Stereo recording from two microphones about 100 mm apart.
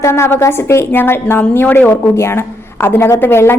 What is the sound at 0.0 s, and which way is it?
A woman's voice, 25° left (ahead or behind).